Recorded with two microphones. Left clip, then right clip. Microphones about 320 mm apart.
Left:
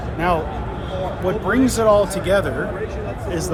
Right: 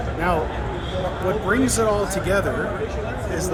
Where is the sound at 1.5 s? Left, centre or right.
Left.